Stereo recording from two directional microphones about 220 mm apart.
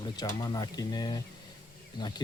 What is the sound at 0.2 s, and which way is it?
Speech, 15° left (ahead or behind).